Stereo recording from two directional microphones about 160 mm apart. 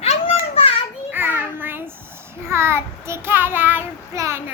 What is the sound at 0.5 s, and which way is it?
Children playing, 35° left (ahead or behind).